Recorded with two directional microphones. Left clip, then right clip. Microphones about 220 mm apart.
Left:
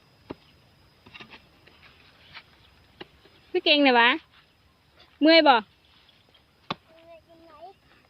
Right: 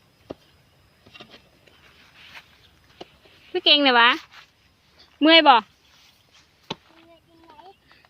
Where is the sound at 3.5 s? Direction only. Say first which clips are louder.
Right 3 dB; 15° left (ahead or behind).